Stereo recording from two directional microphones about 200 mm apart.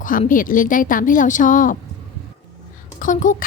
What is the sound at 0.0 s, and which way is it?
A woman's voice, 45° left (ahead or behind).